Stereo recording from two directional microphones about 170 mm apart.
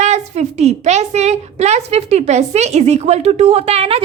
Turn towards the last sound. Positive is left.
turn(degrees=-35)  # may be behind; listen again after turning